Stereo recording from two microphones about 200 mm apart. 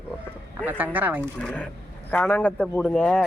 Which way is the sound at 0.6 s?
10° right (ahead or behind).